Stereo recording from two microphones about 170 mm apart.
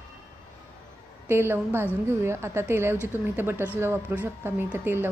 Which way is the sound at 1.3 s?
15° right (ahead or behind).